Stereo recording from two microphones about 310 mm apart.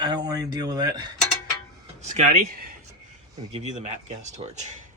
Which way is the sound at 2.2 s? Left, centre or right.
Right.